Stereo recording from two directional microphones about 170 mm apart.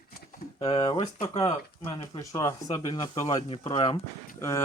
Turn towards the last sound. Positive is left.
turn(degrees=15)  # may be behind; listen again after turning